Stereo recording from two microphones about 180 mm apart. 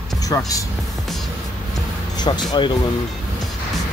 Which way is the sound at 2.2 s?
25° left (ahead or behind).